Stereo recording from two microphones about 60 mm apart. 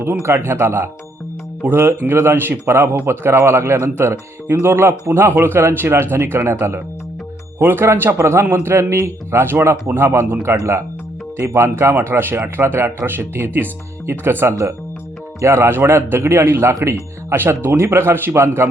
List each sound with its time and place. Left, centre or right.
0.2 s a man's voice: right
11.3 s speech: right
11.9 s a man's voice: right
15.4 s speech: right